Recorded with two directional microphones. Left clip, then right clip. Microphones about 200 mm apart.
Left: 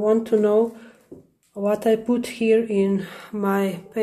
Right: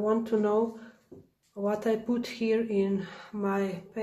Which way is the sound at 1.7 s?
25° left (ahead or behind).